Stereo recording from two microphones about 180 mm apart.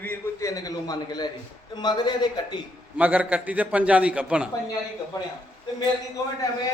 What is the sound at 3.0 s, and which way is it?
A man's voice, 5° right (ahead or behind).